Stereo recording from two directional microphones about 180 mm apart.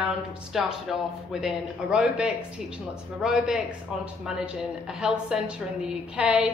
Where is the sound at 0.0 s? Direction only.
5° right (ahead or behind).